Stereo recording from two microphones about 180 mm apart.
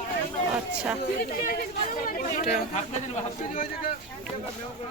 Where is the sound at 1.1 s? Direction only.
55° left (ahead or behind).